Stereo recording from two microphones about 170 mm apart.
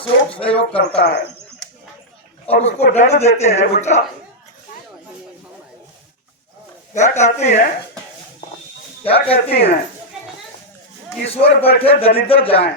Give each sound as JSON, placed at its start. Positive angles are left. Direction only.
{"t": 0.0, "sound": "speech", "side_deg": 30}
{"t": 2.5, "sound": "speech", "side_deg": 40}
{"t": 6.9, "sound": "speech", "side_deg": 45}
{"t": 9.0, "sound": "speech", "side_deg": 35}
{"t": 11.3, "sound": "speech", "side_deg": 35}